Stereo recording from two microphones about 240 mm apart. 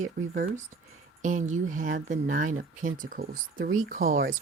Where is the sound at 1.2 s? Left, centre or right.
Right.